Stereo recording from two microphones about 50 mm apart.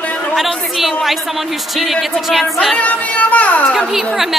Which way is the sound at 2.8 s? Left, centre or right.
Left.